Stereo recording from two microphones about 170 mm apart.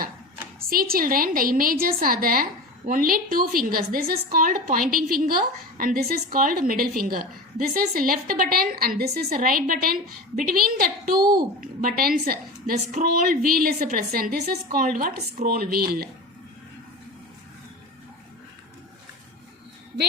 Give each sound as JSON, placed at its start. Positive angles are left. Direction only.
{"t": 0.7, "sound": "a woman's voice", "side_deg": -60}
{"t": 11.2, "sound": "a child's voice", "side_deg": -25}
{"t": 11.6, "sound": "a woman's voice", "side_deg": -55}